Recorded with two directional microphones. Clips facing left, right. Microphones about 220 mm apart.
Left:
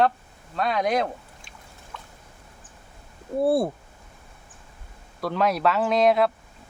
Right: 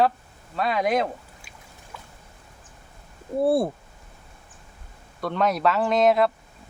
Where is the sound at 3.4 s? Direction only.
Centre (ahead or behind).